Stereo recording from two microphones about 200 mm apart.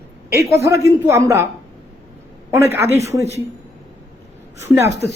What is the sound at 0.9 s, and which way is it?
Speech, 15° right (ahead or behind).